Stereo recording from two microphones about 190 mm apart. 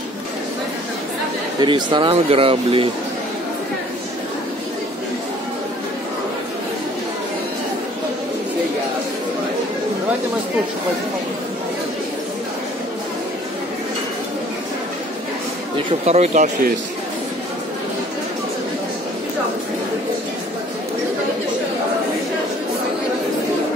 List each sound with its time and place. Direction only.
1.6 s speech: 25° right (ahead or behind)
16.1 s speech: 35° right (ahead or behind)